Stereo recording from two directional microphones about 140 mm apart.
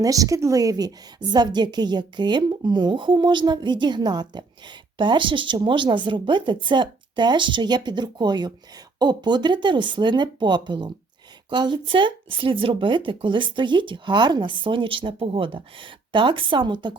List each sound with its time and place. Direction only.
0.0 s a woman's voice: 25° right (ahead or behind)